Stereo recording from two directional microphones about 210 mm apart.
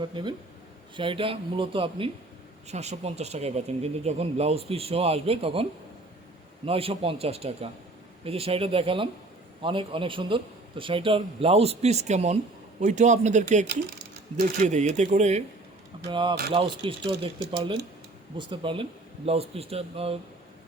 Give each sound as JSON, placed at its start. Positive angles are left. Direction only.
{"t": 0.0, "sound": "speech", "side_deg": -20}
{"t": 6.7, "sound": "speech", "side_deg": -25}
{"t": 18.3, "sound": "speech", "side_deg": -25}